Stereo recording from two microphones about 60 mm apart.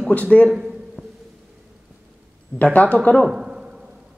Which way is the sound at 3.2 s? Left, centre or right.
Centre.